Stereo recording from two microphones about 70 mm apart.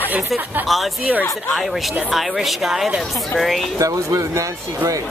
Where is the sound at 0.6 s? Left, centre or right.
Centre.